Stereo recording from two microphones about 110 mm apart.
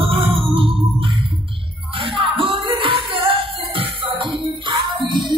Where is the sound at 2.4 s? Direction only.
50° right (ahead or behind).